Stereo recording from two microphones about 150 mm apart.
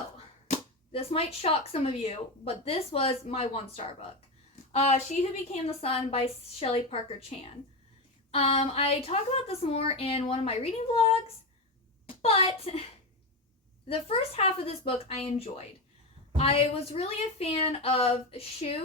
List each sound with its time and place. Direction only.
0.4 s speech: 45° left (ahead or behind)
13.8 s speech: 40° left (ahead or behind)